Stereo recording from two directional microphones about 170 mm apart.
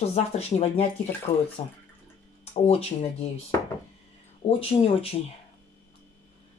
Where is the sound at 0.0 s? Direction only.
40° left (ahead or behind).